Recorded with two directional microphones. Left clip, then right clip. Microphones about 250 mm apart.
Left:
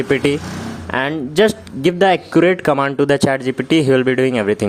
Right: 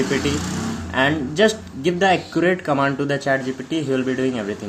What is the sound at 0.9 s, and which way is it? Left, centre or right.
Speech, left.